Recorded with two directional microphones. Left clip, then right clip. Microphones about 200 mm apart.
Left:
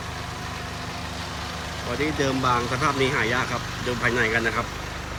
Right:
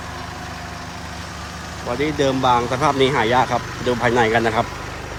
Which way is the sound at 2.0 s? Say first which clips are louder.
Right 6 dB; 15° right (ahead or behind).